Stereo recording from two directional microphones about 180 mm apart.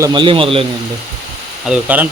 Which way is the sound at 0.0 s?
25° right (ahead or behind).